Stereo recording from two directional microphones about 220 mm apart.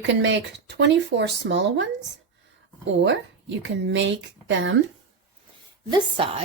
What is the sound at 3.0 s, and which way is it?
Speech, 55° right (ahead or behind).